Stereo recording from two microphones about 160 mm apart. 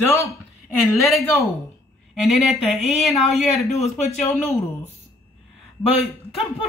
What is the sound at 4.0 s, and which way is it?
Speech, 40° left (ahead or behind).